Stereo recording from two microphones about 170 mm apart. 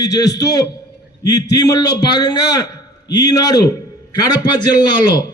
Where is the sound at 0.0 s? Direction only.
20° left (ahead or behind).